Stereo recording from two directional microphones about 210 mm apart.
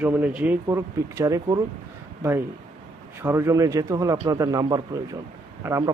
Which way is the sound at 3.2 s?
15° right (ahead or behind).